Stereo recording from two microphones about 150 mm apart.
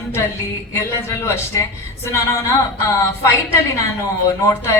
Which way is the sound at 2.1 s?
20° left (ahead or behind).